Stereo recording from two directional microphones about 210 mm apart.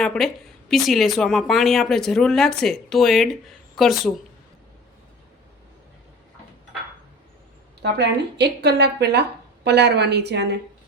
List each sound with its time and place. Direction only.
0.0 s a woman's voice: 5° left (ahead or behind)
7.8 s a woman's voice: 50° right (ahead or behind)